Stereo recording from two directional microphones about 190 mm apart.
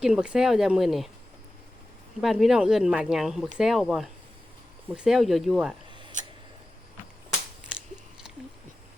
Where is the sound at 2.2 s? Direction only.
Centre (ahead or behind).